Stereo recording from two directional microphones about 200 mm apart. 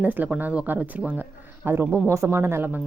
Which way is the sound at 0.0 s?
10° right (ahead or behind).